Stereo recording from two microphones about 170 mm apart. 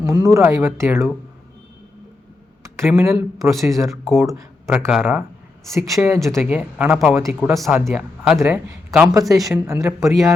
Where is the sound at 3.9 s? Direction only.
Centre (ahead or behind).